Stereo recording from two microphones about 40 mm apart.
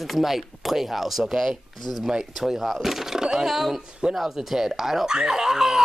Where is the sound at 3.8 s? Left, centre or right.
Centre.